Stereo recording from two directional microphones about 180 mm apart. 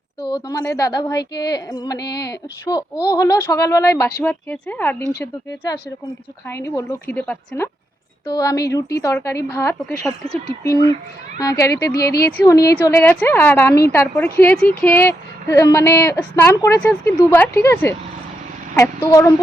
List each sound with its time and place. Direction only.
0.2 s a woman's voice: 25° left (ahead or behind)
3.1 s a woman's voice: 20° left (ahead or behind)
8.3 s a woman's voice: 20° left (ahead or behind)
11.9 s speech: 60° left (ahead or behind)
12.2 s a woman's voice: 20° left (ahead or behind)